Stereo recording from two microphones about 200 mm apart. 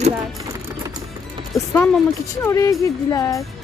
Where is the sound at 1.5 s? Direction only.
10° left (ahead or behind).